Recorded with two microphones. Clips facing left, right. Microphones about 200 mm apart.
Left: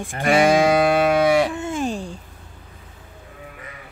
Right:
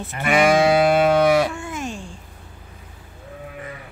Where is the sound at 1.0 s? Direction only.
15° left (ahead or behind); by 2.1 s 35° left (ahead or behind).